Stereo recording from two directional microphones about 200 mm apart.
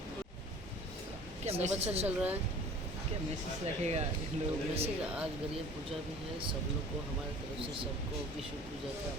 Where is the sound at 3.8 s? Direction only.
35° right (ahead or behind).